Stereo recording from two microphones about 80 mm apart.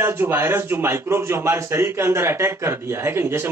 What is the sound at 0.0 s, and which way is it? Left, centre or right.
A man's voice, right.